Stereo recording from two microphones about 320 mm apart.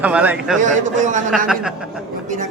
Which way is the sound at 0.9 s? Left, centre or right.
Right.